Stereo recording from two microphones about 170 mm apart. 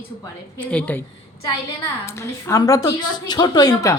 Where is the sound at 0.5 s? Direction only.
10° left (ahead or behind).